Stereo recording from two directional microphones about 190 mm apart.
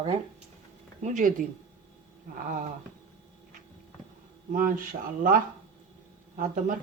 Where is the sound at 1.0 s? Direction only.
40° right (ahead or behind).